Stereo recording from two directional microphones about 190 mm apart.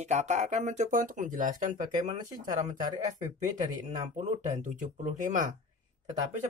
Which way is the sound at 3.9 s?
40° right (ahead or behind).